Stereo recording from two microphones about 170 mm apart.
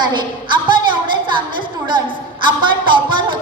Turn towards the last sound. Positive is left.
turn(degrees=-30)  # may be behind; listen again after turning